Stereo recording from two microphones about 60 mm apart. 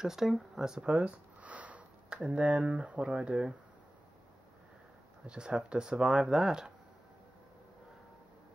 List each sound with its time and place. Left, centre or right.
0.0 s speech: centre
3.1 s speech: centre
5.2 s speech: centre